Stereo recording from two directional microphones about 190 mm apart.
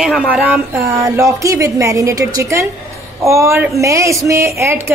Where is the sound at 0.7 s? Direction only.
15° right (ahead or behind).